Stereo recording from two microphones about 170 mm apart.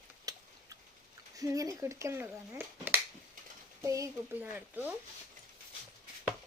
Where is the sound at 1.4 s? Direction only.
20° right (ahead or behind).